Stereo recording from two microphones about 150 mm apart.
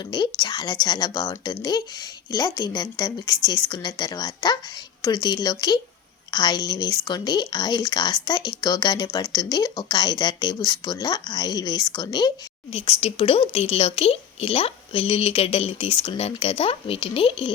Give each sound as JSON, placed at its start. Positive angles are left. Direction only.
{"t": 0.0, "sound": "a woman's voice", "side_deg": 30}
{"t": 12.7, "sound": "a woman's voice", "side_deg": 40}